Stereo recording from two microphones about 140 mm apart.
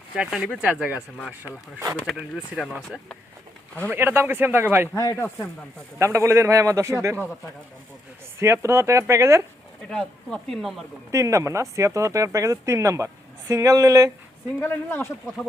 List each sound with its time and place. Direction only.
0.2 s speech: 5° right (ahead or behind)
3.9 s speech: 15° right (ahead or behind)
4.9 s speech: 20° left (ahead or behind)
6.0 s speech: 20° right (ahead or behind)
8.4 s speech: 20° right (ahead or behind)
9.9 s speech: 5° left (ahead or behind)
11.1 s speech: 20° right (ahead or behind)
14.6 s speech: 15° left (ahead or behind)